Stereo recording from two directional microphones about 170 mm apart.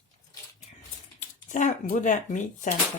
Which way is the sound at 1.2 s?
45° left (ahead or behind).